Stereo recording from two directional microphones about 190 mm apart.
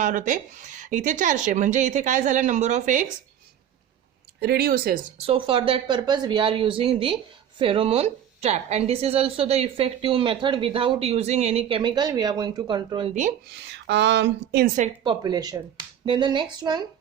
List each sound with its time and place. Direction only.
0.0 s speech: 45° right (ahead or behind)
4.4 s speech: 60° right (ahead or behind)
5.1 s a woman's voice: 30° right (ahead or behind)
13.5 s speech: 65° right (ahead or behind)
15.0 s a woman's voice: 20° right (ahead or behind)